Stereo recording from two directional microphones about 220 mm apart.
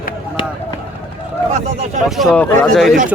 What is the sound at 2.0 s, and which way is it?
Speech, centre (ahead or behind).